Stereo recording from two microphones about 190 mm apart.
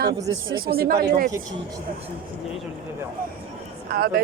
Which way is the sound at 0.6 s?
50° right (ahead or behind).